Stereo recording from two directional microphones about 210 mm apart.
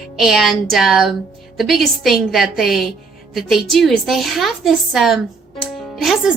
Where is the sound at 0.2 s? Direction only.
Centre (ahead or behind).